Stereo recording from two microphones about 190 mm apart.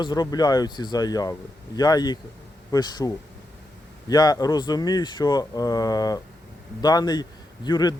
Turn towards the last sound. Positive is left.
turn(degrees=20)  # may be behind; listen again after turning